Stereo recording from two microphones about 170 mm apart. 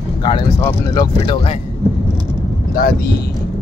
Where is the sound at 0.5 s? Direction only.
20° left (ahead or behind).